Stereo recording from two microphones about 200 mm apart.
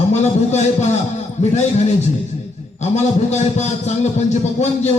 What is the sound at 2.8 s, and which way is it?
A man's voice, 35° left (ahead or behind).